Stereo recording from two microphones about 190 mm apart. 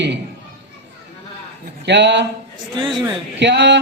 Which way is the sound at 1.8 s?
65° right (ahead or behind).